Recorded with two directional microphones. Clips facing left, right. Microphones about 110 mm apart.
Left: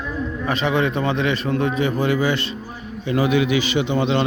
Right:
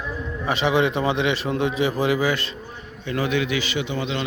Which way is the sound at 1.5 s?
10° right (ahead or behind).